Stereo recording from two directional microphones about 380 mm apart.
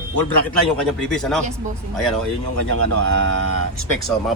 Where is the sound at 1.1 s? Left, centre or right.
Centre.